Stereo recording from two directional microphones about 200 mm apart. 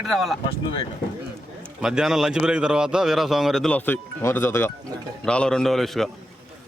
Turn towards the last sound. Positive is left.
turn(degrees=0)  # may be behind; listen again after turning